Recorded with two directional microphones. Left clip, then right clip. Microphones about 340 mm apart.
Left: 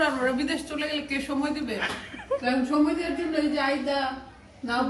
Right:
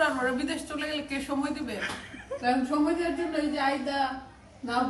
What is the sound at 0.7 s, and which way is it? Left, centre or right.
Speech, right.